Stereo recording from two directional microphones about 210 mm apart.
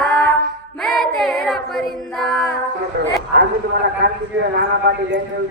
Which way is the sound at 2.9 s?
55° right (ahead or behind).